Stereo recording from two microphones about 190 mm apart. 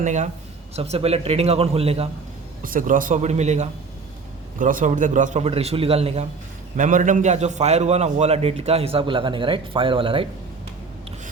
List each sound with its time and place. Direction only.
0.0 s a man's voice: 40° right (ahead or behind)
2.6 s a man's voice: 45° right (ahead or behind)
6.7 s a man's voice: 40° right (ahead or behind)